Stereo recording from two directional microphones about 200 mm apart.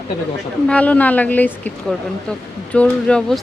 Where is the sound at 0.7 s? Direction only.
5° left (ahead or behind).